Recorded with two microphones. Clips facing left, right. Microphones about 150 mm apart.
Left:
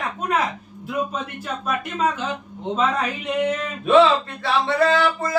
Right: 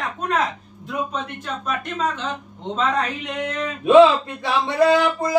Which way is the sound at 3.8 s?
15° right (ahead or behind).